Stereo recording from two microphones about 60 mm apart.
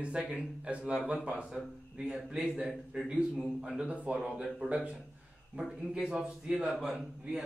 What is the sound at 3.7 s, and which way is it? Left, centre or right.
Speech, right.